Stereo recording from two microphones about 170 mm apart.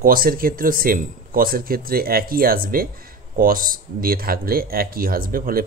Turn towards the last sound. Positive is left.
turn(degrees=-55)  # may be behind; listen again after turning